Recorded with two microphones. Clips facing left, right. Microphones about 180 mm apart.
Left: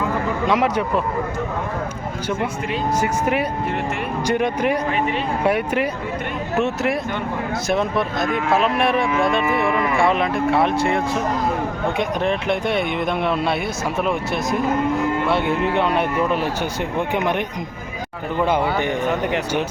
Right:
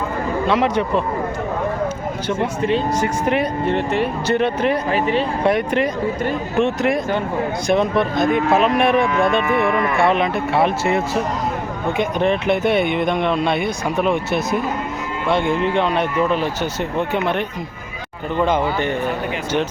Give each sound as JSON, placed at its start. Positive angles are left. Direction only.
{"t": 0.4, "sound": "speech", "side_deg": 10}
{"t": 2.4, "sound": "speech", "side_deg": -30}
{"t": 3.0, "sound": "speech", "side_deg": 10}
{"t": 3.7, "sound": "speech", "side_deg": -30}
{"t": 4.3, "sound": "speech", "side_deg": 10}
{"t": 4.9, "sound": "speech", "side_deg": -35}
{"t": 5.4, "sound": "speech", "side_deg": 10}